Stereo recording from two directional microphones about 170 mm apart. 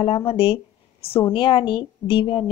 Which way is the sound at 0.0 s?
35° left (ahead or behind).